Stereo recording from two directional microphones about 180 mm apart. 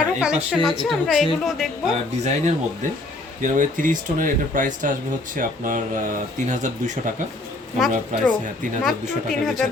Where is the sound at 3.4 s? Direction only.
45° right (ahead or behind).